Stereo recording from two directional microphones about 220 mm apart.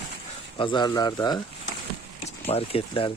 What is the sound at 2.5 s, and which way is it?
Speech, 25° left (ahead or behind).